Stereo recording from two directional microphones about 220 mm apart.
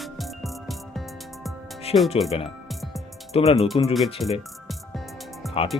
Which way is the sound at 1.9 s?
25° left (ahead or behind).